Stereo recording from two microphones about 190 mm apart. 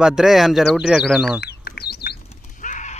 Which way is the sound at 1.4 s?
55° left (ahead or behind).